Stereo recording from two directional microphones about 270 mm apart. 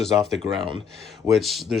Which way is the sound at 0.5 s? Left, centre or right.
Centre.